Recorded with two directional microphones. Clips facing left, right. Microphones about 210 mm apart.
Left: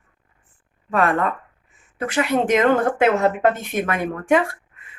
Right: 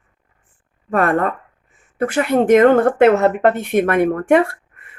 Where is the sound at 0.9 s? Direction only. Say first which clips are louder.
Right 3 dB; 50° right (ahead or behind).